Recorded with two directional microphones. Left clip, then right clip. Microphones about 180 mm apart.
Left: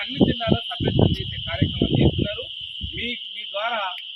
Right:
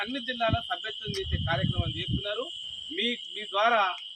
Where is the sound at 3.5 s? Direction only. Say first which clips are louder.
Right 2 dB; 25° left (ahead or behind).